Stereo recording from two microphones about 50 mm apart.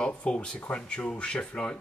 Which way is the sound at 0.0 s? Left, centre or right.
Centre.